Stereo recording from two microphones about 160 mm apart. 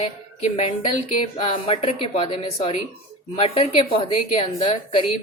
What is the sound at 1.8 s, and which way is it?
A woman's voice, 35° left (ahead or behind).